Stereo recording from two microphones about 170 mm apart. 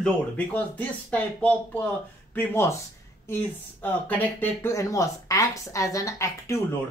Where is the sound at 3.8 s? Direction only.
10° left (ahead or behind).